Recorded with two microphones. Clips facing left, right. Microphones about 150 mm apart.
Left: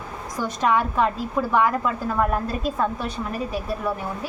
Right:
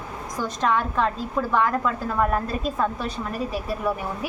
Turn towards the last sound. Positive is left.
turn(degrees=0)  # may be behind; listen again after turning